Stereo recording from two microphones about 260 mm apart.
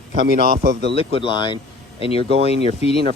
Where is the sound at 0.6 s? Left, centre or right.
Right.